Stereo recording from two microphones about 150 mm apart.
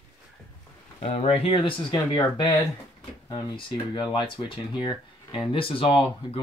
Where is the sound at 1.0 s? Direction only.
40° left (ahead or behind).